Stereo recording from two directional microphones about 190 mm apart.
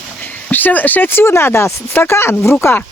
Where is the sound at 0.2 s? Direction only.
10° left (ahead or behind).